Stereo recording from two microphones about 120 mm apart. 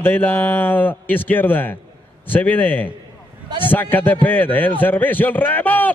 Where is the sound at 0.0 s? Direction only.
15° left (ahead or behind).